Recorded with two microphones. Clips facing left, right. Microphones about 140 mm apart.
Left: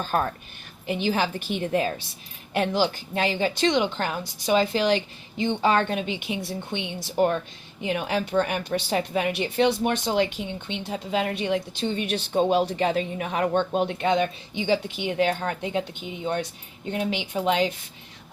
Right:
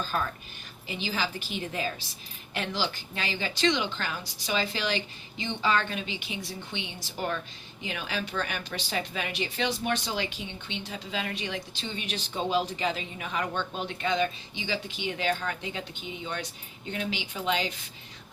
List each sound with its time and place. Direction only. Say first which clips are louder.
0.0 s a woman's voice: left 6 dB; 50° left (ahead or behind)
16.9 s a woman's voice: left 7 dB; 50° left (ahead or behind)